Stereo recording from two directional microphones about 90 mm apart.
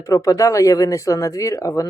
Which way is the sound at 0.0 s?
40° left (ahead or behind).